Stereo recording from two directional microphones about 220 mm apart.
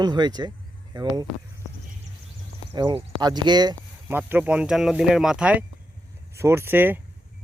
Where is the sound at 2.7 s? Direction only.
20° right (ahead or behind).